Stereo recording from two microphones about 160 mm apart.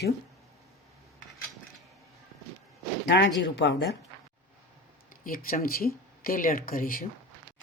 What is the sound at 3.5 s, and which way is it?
Speech, 90° left.